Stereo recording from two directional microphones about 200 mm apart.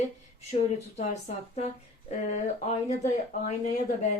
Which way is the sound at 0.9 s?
35° left (ahead or behind).